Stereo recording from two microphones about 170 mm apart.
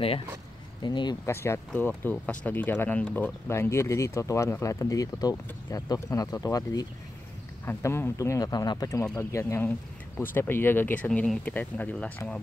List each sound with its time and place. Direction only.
0.8 s speech: 25° left (ahead or behind)
1.3 s speech: 15° left (ahead or behind)